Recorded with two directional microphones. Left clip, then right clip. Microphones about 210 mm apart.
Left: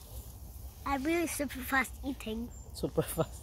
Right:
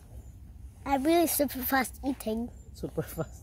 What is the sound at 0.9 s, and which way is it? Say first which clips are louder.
Speech: right 7 dB; 55° right (ahead or behind).